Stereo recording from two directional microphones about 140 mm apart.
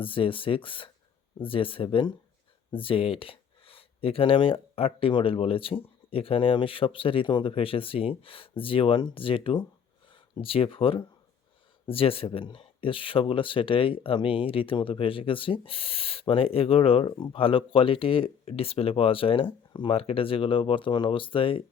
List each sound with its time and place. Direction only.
0.0 s speech: 40° left (ahead or behind)